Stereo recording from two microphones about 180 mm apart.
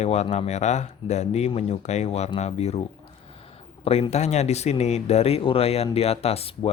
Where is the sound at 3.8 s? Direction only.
35° left (ahead or behind).